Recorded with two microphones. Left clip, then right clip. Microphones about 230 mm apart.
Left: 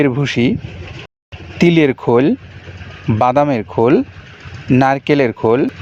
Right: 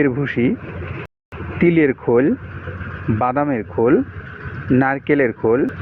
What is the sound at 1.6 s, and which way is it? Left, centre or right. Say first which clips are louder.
Speech: left 3 dB; left.